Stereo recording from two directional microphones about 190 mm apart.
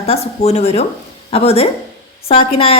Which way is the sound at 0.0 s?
30° left (ahead or behind).